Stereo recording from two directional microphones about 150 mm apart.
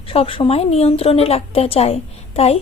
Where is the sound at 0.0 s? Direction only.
40° left (ahead or behind).